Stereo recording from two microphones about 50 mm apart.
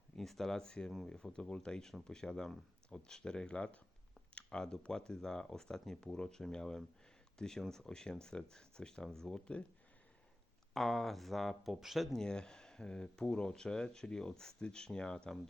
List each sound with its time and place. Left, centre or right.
0.2 s speech: centre; by 3.8 s left
4.4 s speech: centre
10.8 s speech: centre
12.1 s speech: centre